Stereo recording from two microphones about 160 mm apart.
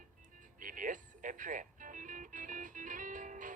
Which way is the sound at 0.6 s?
55° right (ahead or behind).